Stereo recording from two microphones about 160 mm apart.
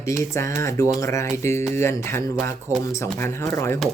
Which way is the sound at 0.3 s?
15° left (ahead or behind).